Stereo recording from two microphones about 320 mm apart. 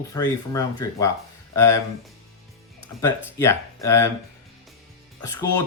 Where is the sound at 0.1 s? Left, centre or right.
Centre.